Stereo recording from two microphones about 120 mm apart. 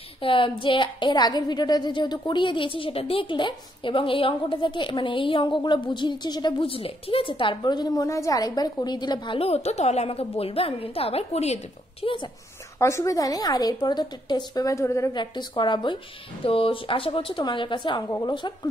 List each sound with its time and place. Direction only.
0.2 s a woman's voice: 45° left (ahead or behind)
9.4 s a woman's voice: 60° left (ahead or behind)
12.7 s a woman's voice: 25° left (ahead or behind)
15.1 s a woman's voice: 40° left (ahead or behind)